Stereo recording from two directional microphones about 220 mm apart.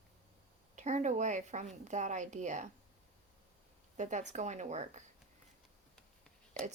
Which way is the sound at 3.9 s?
35° right (ahead or behind).